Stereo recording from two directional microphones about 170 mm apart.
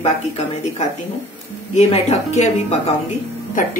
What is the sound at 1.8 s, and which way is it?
Speech, 40° left (ahead or behind).